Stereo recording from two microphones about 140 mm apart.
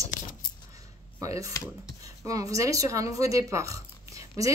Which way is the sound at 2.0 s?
25° right (ahead or behind).